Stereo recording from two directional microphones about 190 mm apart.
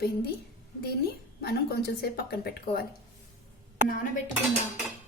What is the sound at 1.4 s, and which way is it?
A woman's voice, 55° left (ahead or behind).